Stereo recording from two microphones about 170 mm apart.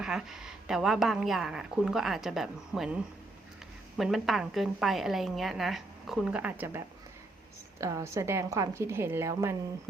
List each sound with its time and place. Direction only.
0.0 s a woman's voice: 5° right (ahead or behind)